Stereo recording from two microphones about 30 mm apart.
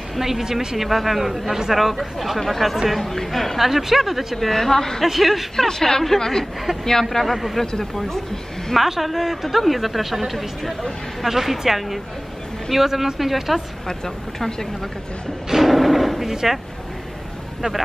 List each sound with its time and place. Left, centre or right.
0.2 s speech: centre
0.7 s a woman's voice: centre
4.4 s speech: centre
5.0 s speech: centre
5.6 s speech: centre
7.2 s a woman's voice: centre
7.8 s speech: centre
8.7 s a woman's voice: centre
13.8 s speech: centre
15.5 s a sound: centre
16.3 s speech: centre
17.6 s speech: centre